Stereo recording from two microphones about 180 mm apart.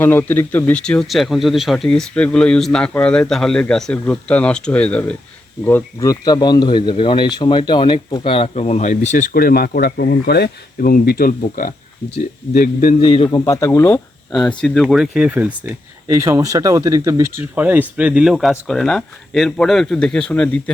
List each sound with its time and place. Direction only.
0.0 s speech: 10° left (ahead or behind); by 13.0 s 50° left (ahead or behind)
13.0 s speech: 30° left (ahead or behind); by 14.0 s 15° left (ahead or behind)
14.3 s speech: centre (ahead or behind)